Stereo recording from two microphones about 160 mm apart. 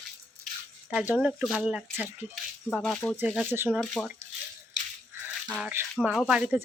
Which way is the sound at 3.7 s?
Centre (ahead or behind).